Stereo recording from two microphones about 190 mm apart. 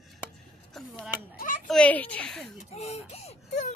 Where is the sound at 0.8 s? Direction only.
Centre (ahead or behind).